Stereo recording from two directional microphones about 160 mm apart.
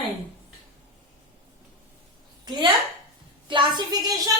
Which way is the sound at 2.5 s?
30° right (ahead or behind).